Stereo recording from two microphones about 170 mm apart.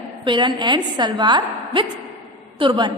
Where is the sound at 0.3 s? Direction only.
25° right (ahead or behind).